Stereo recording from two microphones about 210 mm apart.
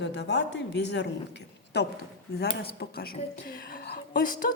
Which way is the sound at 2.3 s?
50° left (ahead or behind).